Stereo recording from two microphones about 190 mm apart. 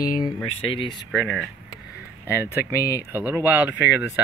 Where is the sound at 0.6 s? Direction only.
25° left (ahead or behind).